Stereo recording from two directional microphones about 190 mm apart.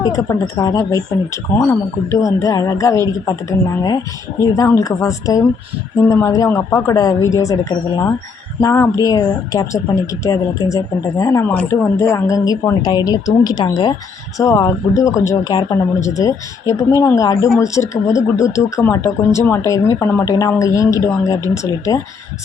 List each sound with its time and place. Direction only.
0.0 s speech: 15° left (ahead or behind)